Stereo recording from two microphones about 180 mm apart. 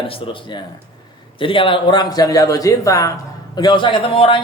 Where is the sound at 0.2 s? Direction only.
30° left (ahead or behind).